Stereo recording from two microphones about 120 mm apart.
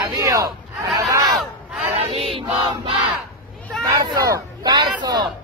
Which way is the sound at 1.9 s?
55° right (ahead or behind).